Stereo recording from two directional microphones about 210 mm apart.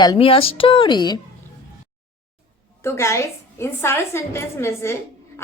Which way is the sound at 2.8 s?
15° left (ahead or behind).